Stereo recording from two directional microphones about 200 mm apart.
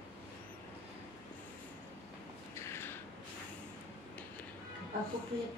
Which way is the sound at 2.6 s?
10° left (ahead or behind).